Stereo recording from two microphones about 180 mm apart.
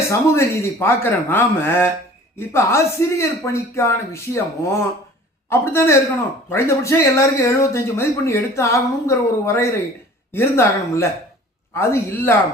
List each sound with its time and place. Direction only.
0.1 s speech: 15° left (ahead or behind)